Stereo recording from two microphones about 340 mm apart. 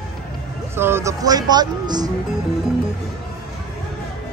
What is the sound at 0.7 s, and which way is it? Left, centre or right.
Speech, centre.